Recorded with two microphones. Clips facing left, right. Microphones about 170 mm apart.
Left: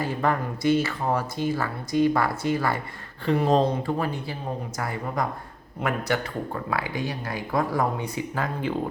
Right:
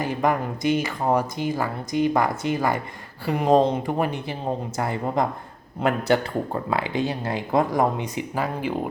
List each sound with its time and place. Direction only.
0.0 s speech: 15° right (ahead or behind)